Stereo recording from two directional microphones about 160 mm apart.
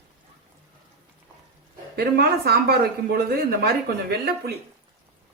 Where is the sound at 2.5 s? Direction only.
80° right.